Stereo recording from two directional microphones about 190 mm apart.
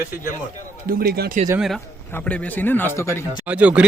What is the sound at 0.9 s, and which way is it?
Speech, 55° right (ahead or behind).